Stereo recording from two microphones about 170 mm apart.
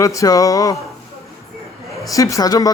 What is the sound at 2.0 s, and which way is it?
Speech, 20° left (ahead or behind).